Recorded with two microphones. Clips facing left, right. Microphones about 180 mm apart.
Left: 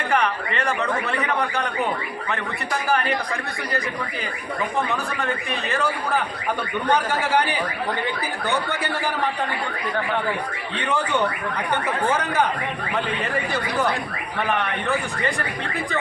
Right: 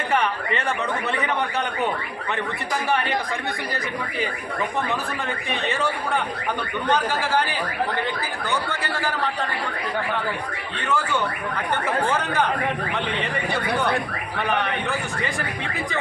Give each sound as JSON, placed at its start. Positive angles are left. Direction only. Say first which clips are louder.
{"t": 5.7, "sound": "speech", "louder": "left 3 dB", "side_deg": 0}
{"t": 6.8, "sound": "speech", "louder": "left 1 dB", "side_deg": 15}
{"t": 10.8, "sound": "speech", "louder": "left 1 dB", "side_deg": 20}